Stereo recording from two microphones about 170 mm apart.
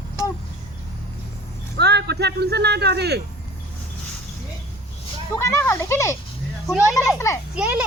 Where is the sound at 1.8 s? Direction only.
80° right.